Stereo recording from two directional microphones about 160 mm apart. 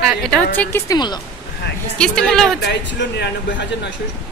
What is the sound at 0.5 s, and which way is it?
Speech, 15° left (ahead or behind).